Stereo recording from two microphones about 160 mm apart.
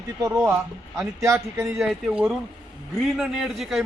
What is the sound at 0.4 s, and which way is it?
A man's voice, 10° right (ahead or behind).